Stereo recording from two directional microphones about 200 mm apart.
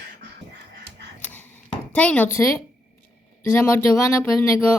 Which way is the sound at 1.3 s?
10° left (ahead or behind).